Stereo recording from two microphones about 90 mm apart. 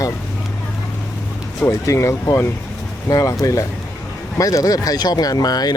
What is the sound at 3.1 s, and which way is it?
Speech, 45° left (ahead or behind).